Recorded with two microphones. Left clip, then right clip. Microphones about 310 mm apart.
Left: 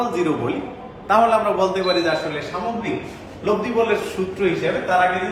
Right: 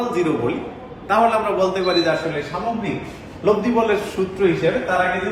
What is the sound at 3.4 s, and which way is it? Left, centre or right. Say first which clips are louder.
A man's voice: right 2 dB; centre.